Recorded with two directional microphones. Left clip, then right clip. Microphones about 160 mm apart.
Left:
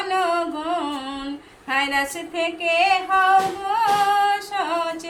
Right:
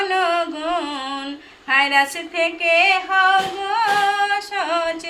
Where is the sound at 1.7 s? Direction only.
10° right (ahead or behind).